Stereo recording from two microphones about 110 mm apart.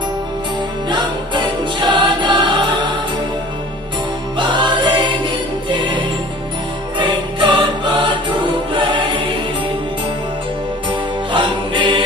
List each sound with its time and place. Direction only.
0.9 s music: 45° right (ahead or behind)
4.4 s music: 45° right (ahead or behind)
7.0 s music: 45° right (ahead or behind)
7.9 s choir: 45° right (ahead or behind)
10.8 s music: 45° right (ahead or behind)